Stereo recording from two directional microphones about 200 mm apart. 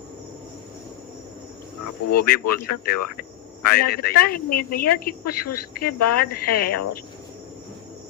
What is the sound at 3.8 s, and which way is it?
A woman's voice, 50° left (ahead or behind).